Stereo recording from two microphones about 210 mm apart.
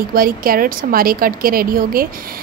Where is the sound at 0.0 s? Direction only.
45° right (ahead or behind).